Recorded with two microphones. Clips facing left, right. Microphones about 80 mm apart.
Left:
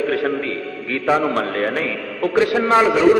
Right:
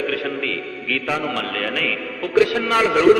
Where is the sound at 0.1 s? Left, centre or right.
Left.